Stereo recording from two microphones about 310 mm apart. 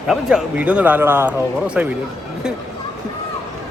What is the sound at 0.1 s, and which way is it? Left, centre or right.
Speech, centre.